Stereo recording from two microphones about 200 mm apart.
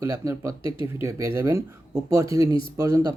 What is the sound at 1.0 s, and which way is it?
Speech, 15° right (ahead or behind).